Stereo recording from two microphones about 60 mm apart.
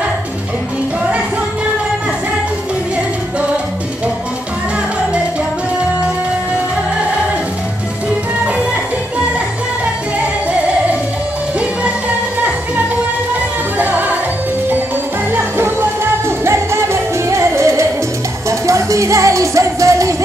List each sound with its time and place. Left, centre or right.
11.8 s music: right
15.3 s music: right